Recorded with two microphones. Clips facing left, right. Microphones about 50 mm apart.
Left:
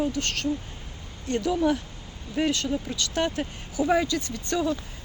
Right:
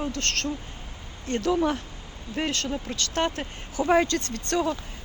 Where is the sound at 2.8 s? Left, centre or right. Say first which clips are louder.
Even; right.